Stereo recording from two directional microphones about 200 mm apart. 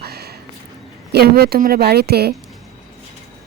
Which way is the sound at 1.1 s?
50° right (ahead or behind).